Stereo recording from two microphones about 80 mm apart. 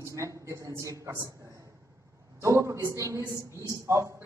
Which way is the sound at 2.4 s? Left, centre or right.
Right.